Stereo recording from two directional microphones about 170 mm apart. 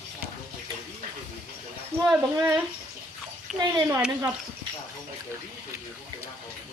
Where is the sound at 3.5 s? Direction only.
Centre (ahead or behind).